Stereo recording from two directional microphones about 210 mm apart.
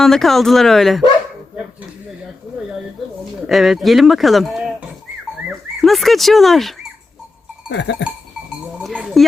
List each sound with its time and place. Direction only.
0.0 s speech: centre (ahead or behind)
3.4 s speech: centre (ahead or behind)
7.7 s cowbell: 55° left (ahead or behind)
8.8 s a sound: centre (ahead or behind)